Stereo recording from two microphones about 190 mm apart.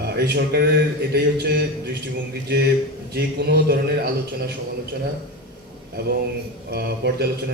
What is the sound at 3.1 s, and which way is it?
A man's voice, 55° right (ahead or behind).